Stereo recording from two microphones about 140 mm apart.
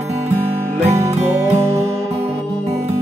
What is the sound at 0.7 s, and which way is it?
Music, 50° right (ahead or behind).